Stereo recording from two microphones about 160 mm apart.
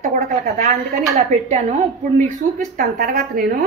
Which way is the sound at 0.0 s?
50° right (ahead or behind).